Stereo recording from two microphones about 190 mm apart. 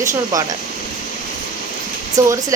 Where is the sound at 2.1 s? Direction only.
20° right (ahead or behind).